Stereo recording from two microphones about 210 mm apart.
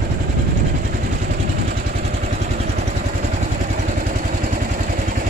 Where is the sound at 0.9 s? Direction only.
40° right (ahead or behind).